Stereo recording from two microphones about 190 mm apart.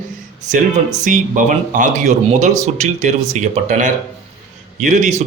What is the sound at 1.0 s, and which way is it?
Speech, 40° right (ahead or behind).